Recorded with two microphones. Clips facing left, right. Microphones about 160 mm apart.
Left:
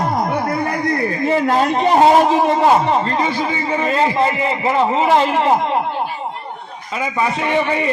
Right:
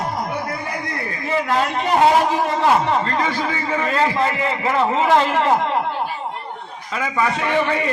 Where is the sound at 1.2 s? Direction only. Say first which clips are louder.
Left 4 dB; 35° left (ahead or behind).